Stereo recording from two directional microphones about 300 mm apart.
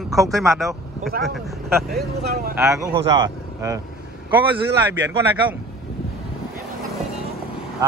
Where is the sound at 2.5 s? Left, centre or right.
Centre.